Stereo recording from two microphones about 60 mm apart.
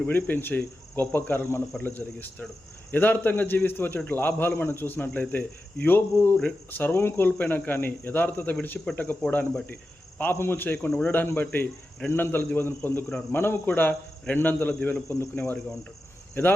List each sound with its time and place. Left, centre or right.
0.0 s a man's voice: left
8.8 s speech: centre
9.3 s speech: left
10.3 s a man's voice: left